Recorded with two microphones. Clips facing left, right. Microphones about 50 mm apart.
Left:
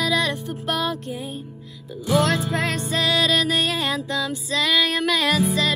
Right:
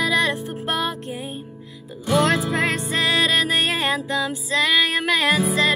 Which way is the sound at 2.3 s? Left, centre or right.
Centre.